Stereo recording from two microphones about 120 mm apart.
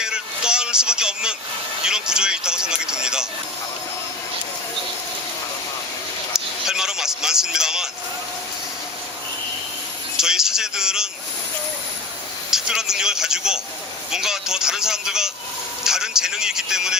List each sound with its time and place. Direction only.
0.0 s vehicle: 5° right (ahead or behind)
1.8 s speech: 5° right (ahead or behind)
6.3 s a sound: 5° right (ahead or behind)
10.2 s a man's voice: 5° right (ahead or behind)
12.5 s a man's voice: 5° right (ahead or behind)
15.8 s a sound: 5° right (ahead or behind)